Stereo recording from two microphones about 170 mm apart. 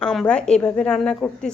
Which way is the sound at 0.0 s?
5° left (ahead or behind).